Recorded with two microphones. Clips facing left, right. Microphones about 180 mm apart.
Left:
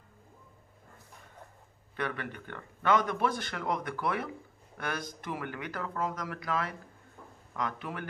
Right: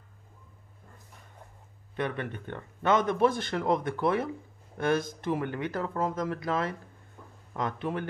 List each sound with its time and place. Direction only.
2.0 s speech: 20° right (ahead or behind)